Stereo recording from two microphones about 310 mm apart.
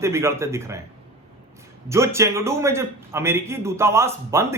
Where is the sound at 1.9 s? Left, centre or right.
Centre.